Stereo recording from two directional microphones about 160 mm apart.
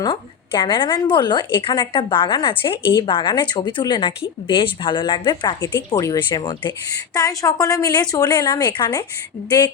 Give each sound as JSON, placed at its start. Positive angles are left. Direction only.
{"t": 0.0, "sound": "a woman's voice", "side_deg": 30}